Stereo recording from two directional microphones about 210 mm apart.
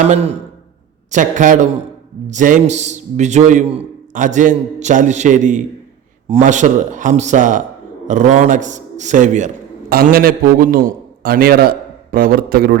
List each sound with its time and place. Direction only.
0.1 s a man's voice: 30° right (ahead or behind); by 12.8 s 45° right (ahead or behind)